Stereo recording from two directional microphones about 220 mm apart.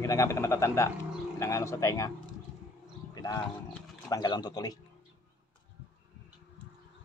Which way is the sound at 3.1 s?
15° left (ahead or behind).